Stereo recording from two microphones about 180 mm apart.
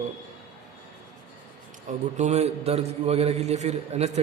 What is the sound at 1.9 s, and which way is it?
A man's voice, 40° right (ahead or behind).